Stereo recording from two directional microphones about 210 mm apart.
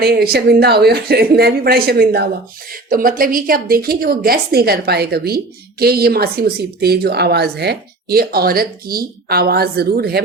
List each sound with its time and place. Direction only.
0.0 s speech: 50° right (ahead or behind)